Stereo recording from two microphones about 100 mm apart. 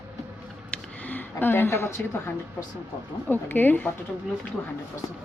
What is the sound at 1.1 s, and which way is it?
Speech, 20° left (ahead or behind).